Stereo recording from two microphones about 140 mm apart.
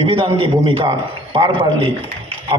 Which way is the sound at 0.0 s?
40° right (ahead or behind).